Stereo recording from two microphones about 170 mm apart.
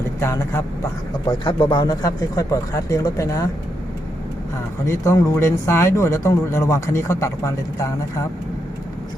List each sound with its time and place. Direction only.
0.2 s speech: 15° left (ahead or behind)
1.5 s a man's voice: 30° left (ahead or behind)
4.9 s speech: 15° left (ahead or behind)